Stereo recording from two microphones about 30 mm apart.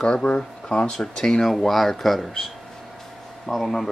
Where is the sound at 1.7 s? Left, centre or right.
Centre.